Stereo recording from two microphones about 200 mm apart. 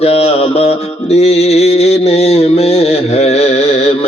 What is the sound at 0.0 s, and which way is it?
Mantra, 30° left (ahead or behind).